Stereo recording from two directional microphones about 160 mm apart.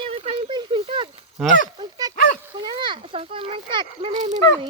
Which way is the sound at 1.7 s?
25° right (ahead or behind).